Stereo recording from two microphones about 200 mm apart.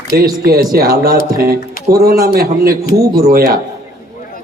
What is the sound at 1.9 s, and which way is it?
Speech, 45° right (ahead or behind).